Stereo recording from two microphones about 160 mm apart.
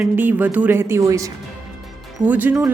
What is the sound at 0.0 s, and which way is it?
A woman's voice, 10° right (ahead or behind).